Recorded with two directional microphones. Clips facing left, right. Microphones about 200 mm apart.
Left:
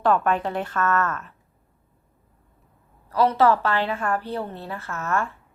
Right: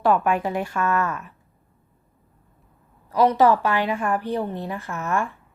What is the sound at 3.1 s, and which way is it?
A woman's voice, 15° right (ahead or behind).